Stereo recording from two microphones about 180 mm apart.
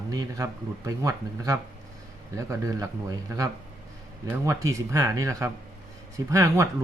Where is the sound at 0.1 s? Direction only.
20° right (ahead or behind).